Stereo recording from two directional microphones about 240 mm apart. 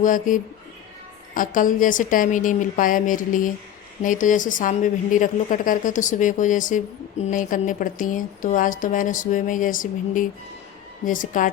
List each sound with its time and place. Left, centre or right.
0.0 s a woman's voice: left